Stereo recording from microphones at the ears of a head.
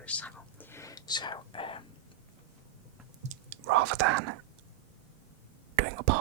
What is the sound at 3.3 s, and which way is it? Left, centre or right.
Whispering, right.